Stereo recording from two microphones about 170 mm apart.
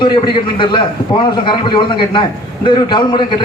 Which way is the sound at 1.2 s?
30° left (ahead or behind).